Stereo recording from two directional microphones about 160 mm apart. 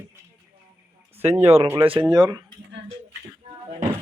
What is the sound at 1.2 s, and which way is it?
Speech, 40° right (ahead or behind).